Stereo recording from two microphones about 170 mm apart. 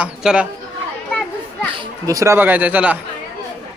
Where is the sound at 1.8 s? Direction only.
20° right (ahead or behind).